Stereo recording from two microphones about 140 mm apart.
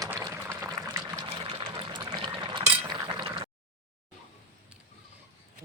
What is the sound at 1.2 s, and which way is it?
Pour, 40° right (ahead or behind).